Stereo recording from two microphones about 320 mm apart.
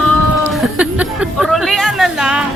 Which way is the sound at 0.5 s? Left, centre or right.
Centre.